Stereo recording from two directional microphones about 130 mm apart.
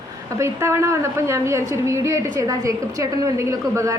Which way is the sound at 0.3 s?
20° right (ahead or behind).